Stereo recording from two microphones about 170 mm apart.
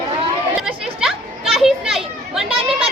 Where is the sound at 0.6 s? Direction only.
Centre (ahead or behind).